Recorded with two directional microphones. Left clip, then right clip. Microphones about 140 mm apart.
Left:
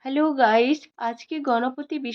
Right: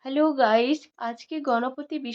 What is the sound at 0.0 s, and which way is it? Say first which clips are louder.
Speech: left 1 dB; 15° left (ahead or behind).